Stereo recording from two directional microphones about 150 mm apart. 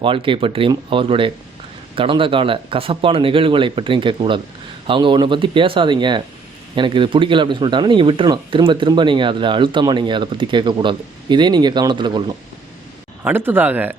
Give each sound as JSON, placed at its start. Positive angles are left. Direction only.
{"t": 0.0, "sound": "speech", "side_deg": -35}
{"t": 13.2, "sound": "speech", "side_deg": -15}